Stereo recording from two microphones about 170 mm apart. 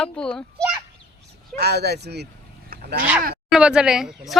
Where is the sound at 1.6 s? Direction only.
70° right (ahead or behind).